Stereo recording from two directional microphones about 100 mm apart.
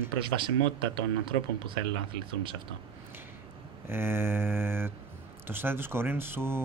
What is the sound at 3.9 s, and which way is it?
Speech, 25° right (ahead or behind).